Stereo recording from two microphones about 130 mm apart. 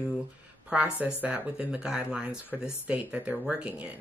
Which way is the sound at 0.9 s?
10° right (ahead or behind).